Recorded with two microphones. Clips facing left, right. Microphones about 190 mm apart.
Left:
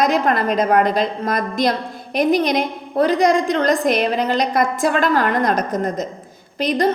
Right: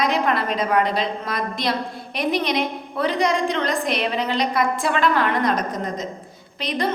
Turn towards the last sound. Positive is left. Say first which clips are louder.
# left 6 dB
turn(degrees=45)  # may be behind; listen again after turning